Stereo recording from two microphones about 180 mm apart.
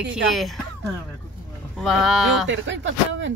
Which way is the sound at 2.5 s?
90° right.